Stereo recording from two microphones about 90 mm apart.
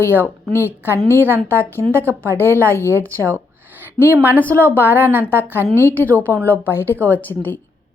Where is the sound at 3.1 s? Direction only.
30° right (ahead or behind).